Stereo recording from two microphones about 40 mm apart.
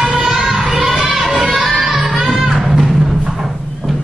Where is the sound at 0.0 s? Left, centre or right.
Centre.